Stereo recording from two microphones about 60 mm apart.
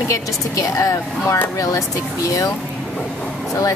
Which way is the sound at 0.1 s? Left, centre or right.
Left.